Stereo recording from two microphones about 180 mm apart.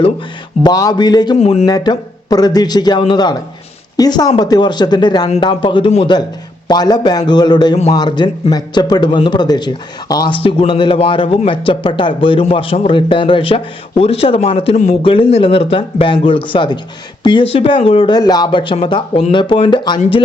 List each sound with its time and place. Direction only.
0.6 s a man's voice: 20° left (ahead or behind)
1.4 s speech: 40° left (ahead or behind)
1.6 s a man's voice: 25° left (ahead or behind)